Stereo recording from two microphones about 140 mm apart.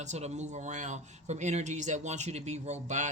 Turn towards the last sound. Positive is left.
turn(degrees=-55)  # may be behind; listen again after turning